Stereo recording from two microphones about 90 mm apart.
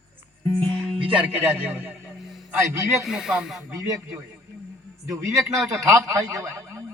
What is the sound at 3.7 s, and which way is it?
Speech, 40° right (ahead or behind).